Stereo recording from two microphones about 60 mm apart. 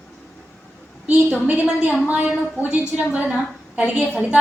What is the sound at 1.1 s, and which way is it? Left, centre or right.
A woman's voice, right.